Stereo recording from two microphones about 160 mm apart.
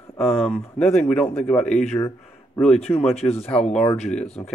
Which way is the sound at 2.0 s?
15° left (ahead or behind).